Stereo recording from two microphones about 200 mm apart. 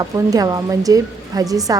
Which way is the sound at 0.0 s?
20° right (ahead or behind).